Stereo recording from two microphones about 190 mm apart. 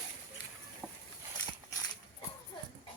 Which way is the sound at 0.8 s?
5° right (ahead or behind).